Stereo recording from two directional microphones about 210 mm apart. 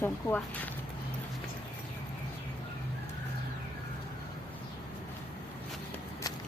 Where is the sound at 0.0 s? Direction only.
10° left (ahead or behind).